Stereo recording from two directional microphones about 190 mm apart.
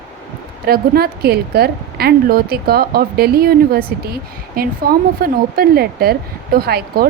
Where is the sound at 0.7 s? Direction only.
55° right (ahead or behind).